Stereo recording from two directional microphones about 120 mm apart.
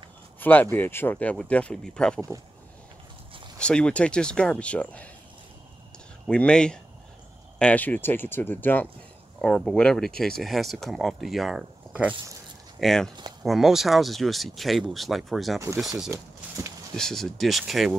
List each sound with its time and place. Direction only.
0.4 s speech: 15° left (ahead or behind)
3.5 s speech: 10° left (ahead or behind)
6.2 s speech: 10° left (ahead or behind); by 12.2 s 10° right (ahead or behind)
12.8 s speech: 5° left (ahead or behind)
16.1 s speech: 20° right (ahead or behind)
16.9 s speech: 5° left (ahead or behind)